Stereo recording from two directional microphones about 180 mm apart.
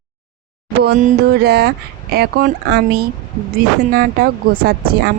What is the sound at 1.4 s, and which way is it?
Speech, 65° right (ahead or behind).